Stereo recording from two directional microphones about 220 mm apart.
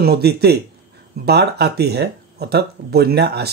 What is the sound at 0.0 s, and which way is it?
Speech, 45° right (ahead or behind).